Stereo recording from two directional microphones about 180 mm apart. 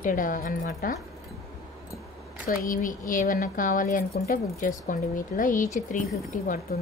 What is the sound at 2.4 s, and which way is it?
Speech, 50° left (ahead or behind).